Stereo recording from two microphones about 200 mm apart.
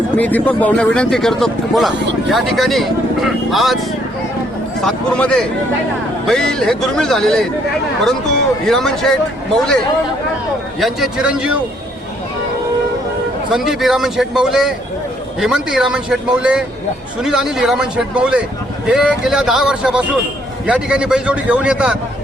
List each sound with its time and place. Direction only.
0.2 s speech: 10° left (ahead or behind)
4.8 s speech: 5° left (ahead or behind)
8.6 s speech: centre (ahead or behind)
10.8 s speech: centre (ahead or behind)
13.7 s speech: centre (ahead or behind)